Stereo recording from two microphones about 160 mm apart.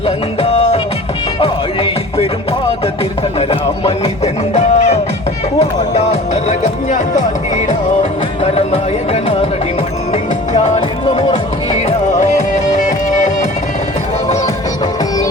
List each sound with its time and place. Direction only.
3.5 s speech: 35° left (ahead or behind)
4.5 s music: 45° left (ahead or behind)
5.5 s speech: 40° left (ahead or behind)
10.1 s music: 45° left (ahead or behind)